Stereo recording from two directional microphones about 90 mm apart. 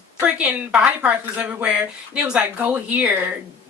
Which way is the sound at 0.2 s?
15° right (ahead or behind).